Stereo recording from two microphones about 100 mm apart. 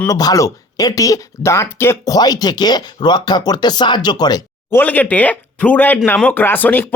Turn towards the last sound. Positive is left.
turn(degrees=20)  # may be behind; listen again after turning